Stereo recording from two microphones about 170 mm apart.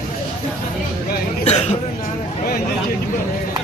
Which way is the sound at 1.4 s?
40° left (ahead or behind).